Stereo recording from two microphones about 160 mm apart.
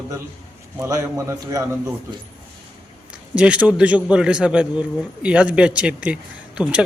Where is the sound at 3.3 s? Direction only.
5° right (ahead or behind).